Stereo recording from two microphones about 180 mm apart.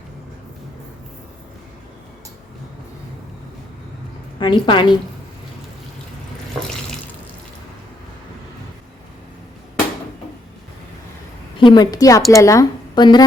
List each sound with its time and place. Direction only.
4.4 s a woman's voice: 25° left (ahead or behind)
11.6 s a woman's voice: 25° left (ahead or behind)